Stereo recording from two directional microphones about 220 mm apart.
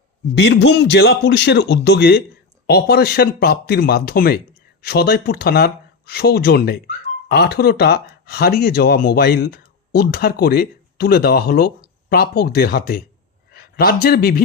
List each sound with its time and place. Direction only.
0.3 s a man's voice: 55° left (ahead or behind)